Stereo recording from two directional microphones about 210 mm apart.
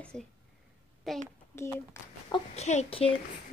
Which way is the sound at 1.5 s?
10° left (ahead or behind).